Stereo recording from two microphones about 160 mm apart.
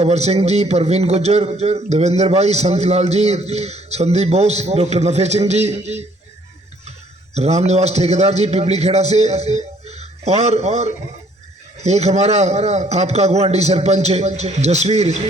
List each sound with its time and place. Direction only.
0.0 s a man's voice: 45° right (ahead or behind)
7.3 s a man's voice: 45° right (ahead or behind)